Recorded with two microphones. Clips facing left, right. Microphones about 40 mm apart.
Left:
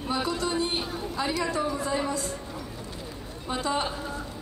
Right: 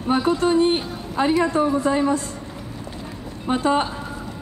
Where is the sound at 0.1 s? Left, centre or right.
Right.